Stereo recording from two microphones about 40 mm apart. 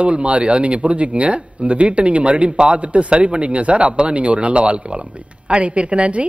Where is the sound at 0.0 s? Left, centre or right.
Right.